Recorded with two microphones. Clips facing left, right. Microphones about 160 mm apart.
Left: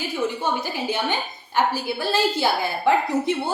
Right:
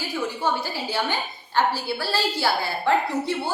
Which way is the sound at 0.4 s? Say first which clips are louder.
Left 1 dB; 20° left (ahead or behind).